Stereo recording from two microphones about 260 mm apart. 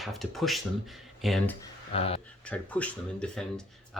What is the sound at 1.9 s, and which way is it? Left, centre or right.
Speech, left.